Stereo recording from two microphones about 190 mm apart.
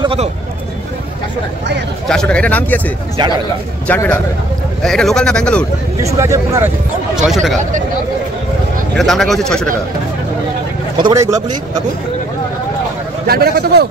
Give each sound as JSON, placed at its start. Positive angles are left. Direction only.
{"t": 0.0, "sound": "speech", "side_deg": -30}
{"t": 2.0, "sound": "speech", "side_deg": 5}
{"t": 3.8, "sound": "speech", "side_deg": 10}
{"t": 6.0, "sound": "speech", "side_deg": -15}
{"t": 7.2, "sound": "speech", "side_deg": 0}
{"t": 8.9, "sound": "speech", "side_deg": 0}
{"t": 11.0, "sound": "speech", "side_deg": -20}
{"t": 13.3, "sound": "a man's voice", "side_deg": -55}